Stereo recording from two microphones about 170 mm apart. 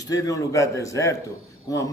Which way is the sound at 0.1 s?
20° left (ahead or behind).